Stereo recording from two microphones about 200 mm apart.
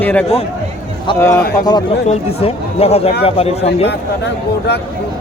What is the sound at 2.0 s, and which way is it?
Speech, 30° left (ahead or behind).